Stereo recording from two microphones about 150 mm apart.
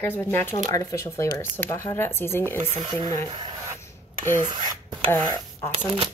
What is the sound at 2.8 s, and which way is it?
Speech, 30° right (ahead or behind).